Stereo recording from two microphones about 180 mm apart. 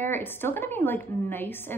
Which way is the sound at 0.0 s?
10° left (ahead or behind).